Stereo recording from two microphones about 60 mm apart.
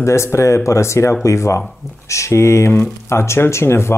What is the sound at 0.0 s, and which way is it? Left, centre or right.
Speech, left.